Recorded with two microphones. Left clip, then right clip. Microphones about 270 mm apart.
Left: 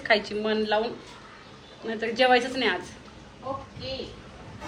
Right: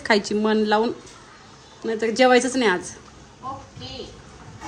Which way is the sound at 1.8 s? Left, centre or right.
Right.